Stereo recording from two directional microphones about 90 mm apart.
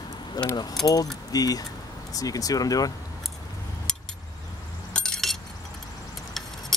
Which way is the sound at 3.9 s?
10° left (ahead or behind).